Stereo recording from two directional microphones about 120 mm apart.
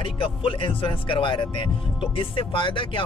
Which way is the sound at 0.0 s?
50° left (ahead or behind).